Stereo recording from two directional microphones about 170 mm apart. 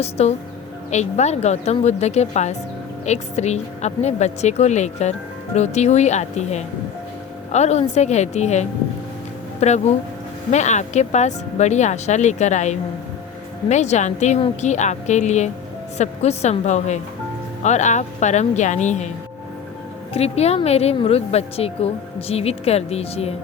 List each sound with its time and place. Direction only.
0.0 s speech: 40° left (ahead or behind)
20.1 s speech: 40° left (ahead or behind)